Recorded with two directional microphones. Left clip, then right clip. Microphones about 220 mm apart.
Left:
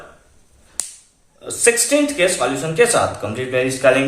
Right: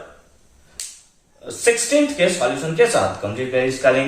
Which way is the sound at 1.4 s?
50° left (ahead or behind).